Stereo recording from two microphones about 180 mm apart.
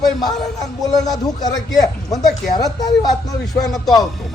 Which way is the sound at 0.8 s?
20° left (ahead or behind).